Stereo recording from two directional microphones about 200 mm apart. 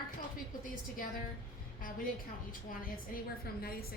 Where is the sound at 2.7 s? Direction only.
45° left (ahead or behind).